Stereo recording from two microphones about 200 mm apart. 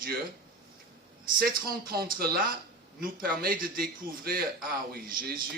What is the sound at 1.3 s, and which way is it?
A man's voice, 50° right (ahead or behind).